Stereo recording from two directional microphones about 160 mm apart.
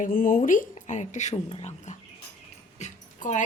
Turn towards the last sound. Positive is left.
turn(degrees=50)  # may be behind; listen again after turning